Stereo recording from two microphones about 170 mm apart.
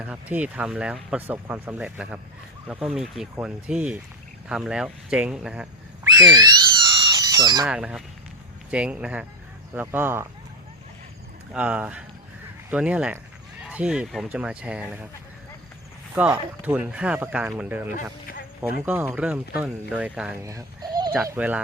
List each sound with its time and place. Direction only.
0.0 s speech: 10° right (ahead or behind)
6.1 s a sound: 20° right (ahead or behind)
7.7 s speech: 5° right (ahead or behind)
11.5 s speech: 5° right (ahead or behind)
16.1 s speech: 10° right (ahead or behind)
18.9 s speech: 10° right (ahead or behind)
20.4 s a sound: 20° right (ahead or behind)
21.3 s speech: 10° right (ahead or behind)